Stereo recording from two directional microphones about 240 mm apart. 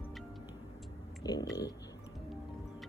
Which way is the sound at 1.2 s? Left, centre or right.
Centre.